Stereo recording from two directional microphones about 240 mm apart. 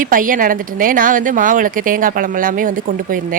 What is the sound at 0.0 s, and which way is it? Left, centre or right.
A woman's voice, right.